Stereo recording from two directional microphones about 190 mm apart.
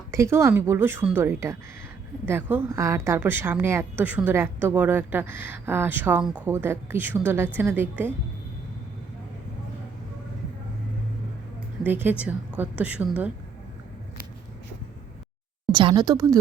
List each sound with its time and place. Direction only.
0.1 s a woman's voice: 15° right (ahead or behind)
11.8 s a woman's voice: 10° right (ahead or behind)
15.7 s speech: 25° right (ahead or behind)